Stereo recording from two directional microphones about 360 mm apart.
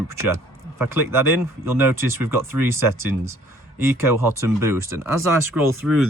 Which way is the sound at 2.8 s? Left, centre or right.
Right.